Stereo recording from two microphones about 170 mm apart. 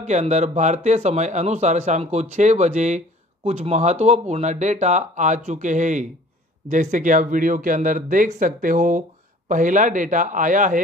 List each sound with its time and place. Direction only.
0.0 s speech: 45° right (ahead or behind)